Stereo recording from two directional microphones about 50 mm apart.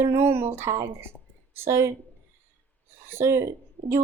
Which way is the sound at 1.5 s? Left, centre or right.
Right.